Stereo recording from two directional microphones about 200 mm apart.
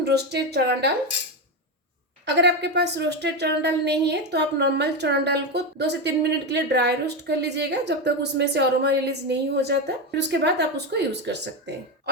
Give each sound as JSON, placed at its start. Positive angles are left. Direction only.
{"t": 0.0, "sound": "a woman's voice", "side_deg": -55}
{"t": 2.2, "sound": "a woman's voice", "side_deg": -60}